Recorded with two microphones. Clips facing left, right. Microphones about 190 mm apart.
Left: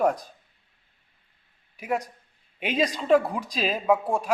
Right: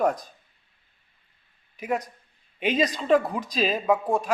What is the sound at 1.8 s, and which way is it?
A man's voice, 10° left (ahead or behind).